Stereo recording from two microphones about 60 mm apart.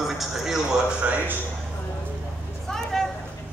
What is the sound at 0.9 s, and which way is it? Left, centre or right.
Speech, right.